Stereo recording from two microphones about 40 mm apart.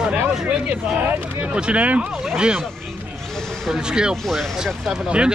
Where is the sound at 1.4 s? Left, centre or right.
Right.